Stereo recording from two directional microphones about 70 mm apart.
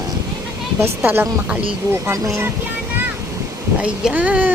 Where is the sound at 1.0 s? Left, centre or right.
Right.